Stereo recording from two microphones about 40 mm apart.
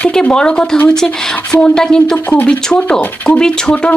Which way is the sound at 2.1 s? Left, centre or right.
Left.